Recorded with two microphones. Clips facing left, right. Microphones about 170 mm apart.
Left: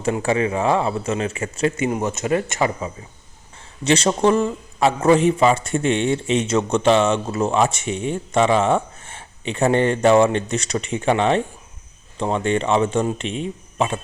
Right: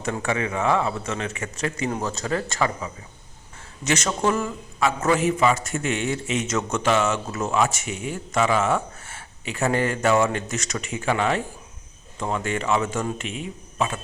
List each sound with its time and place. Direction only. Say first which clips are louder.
0.0 s a man's voice: left 6 dB; 30° left (ahead or behind)